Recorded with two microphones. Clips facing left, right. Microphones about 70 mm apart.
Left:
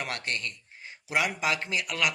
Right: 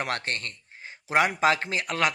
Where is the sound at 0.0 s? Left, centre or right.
Right.